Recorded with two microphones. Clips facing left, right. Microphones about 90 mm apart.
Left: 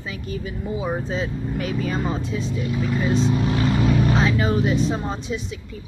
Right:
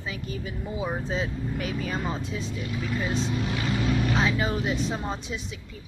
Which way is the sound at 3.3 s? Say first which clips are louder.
Left 7 dB; 40° left (ahead or behind).